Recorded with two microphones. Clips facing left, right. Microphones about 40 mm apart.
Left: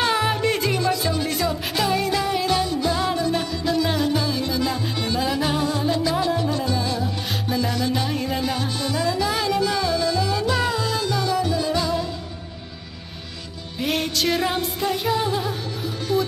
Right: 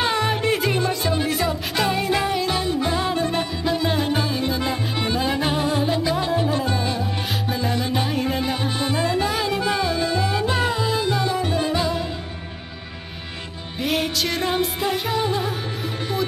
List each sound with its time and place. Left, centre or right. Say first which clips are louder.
0.1 s music: even; centre; by 2.3 s right
2.3 s music: left 1 dB; centre
2.6 s music: even; right
9.3 s music: left 1 dB; centre; by 11.7 s right
11.7 s music: even; right
13.7 s music: right 1 dB; centre